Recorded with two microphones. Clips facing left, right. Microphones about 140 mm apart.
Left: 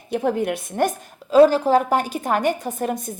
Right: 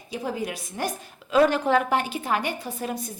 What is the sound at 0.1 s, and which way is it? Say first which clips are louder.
A woman's voice: left 8 dB; 55° left (ahead or behind).